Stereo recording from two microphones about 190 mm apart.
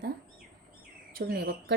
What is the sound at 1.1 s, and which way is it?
Speech, 55° right (ahead or behind).